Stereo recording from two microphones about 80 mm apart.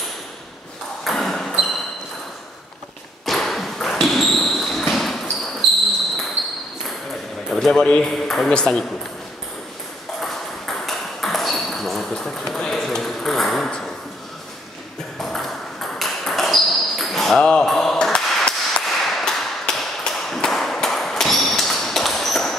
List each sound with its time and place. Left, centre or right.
1.0 s ping: centre
3.3 s a sound: centre
7.4 s speech: centre
10.2 s ping: centre
15.1 s ping: centre
17.5 s a sound: centre